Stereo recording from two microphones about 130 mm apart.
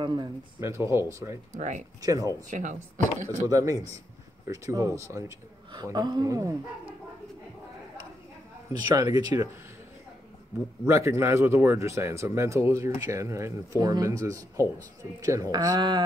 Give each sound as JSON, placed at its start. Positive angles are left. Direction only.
{"t": 0.0, "sound": "speech", "side_deg": -35}
{"t": 0.6, "sound": "speech", "side_deg": -20}
{"t": 2.5, "sound": "speech", "side_deg": -70}
{"t": 3.4, "sound": "speech", "side_deg": -25}
{"t": 8.9, "sound": "speech", "side_deg": -30}
{"t": 10.9, "sound": "speech", "side_deg": -20}